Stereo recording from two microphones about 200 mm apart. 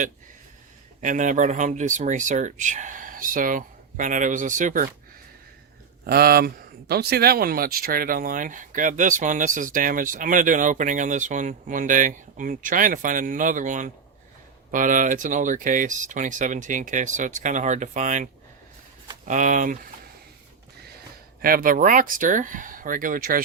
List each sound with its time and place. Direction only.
1.0 s speech: 40° right (ahead or behind)
6.1 s speech: 50° right (ahead or behind)
19.3 s speech: 40° right (ahead or behind)
21.4 s speech: 45° right (ahead or behind)